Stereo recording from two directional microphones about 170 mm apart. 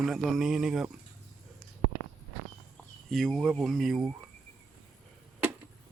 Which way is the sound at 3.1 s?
Centre (ahead or behind).